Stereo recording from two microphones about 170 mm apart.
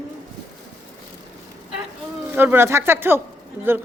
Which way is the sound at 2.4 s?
10° right (ahead or behind).